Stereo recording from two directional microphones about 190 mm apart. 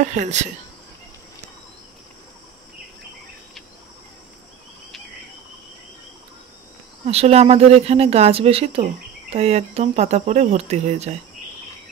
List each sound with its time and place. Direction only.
0.0 s speech: 40° right (ahead or behind)
7.1 s speech: 35° right (ahead or behind)